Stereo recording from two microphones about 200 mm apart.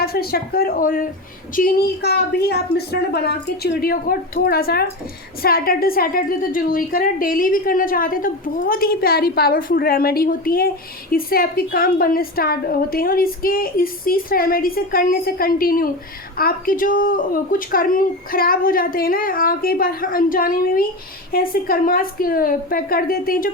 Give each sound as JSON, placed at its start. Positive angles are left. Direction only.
{"t": 0.0, "sound": "a woman's voice", "side_deg": 50}